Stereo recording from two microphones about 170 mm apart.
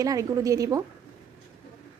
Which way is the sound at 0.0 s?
20° right (ahead or behind).